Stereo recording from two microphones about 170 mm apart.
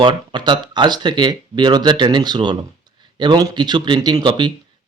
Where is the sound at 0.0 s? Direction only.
25° right (ahead or behind).